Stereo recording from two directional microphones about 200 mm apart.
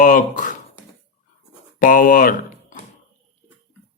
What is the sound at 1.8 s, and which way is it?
Speech, 45° left (ahead or behind).